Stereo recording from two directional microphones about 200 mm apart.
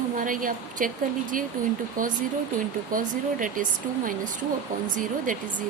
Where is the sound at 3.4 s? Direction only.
40° right (ahead or behind).